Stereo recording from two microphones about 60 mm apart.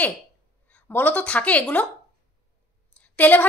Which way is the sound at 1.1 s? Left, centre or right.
Left.